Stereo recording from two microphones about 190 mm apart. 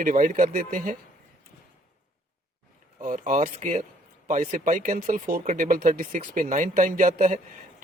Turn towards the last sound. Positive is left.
turn(degrees=-40)  # may be behind; listen again after turning